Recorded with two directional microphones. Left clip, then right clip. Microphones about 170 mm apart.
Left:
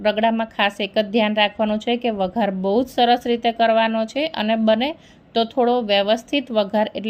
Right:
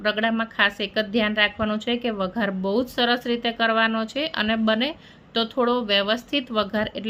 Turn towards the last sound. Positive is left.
turn(degrees=20)  # may be behind; listen again after turning